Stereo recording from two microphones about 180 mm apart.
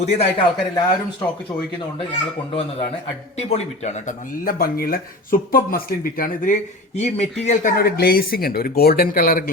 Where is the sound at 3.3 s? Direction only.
40° left (ahead or behind).